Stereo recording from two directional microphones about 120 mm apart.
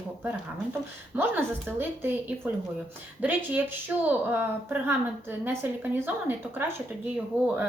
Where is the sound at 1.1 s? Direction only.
15° right (ahead or behind).